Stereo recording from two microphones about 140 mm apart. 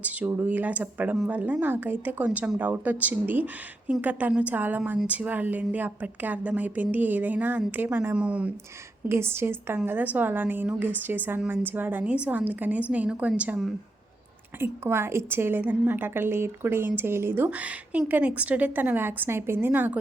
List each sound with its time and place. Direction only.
0.0 s a woman's voice: 10° right (ahead or behind)